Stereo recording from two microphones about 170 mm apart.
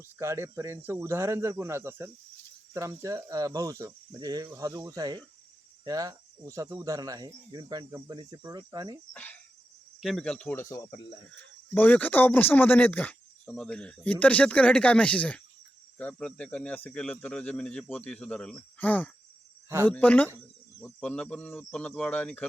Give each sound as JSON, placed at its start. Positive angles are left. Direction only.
{"t": 0.2, "sound": "speech", "side_deg": -15}
{"t": 2.7, "sound": "cricket", "side_deg": -15}
{"t": 9.1, "sound": "speech", "side_deg": 10}